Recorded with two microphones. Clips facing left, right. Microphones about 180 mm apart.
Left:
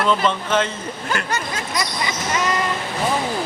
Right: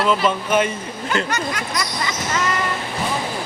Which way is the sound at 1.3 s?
25° left (ahead or behind).